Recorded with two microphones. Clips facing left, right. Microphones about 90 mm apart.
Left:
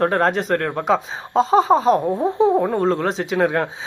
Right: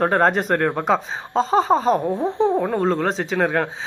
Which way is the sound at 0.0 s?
5° right (ahead or behind).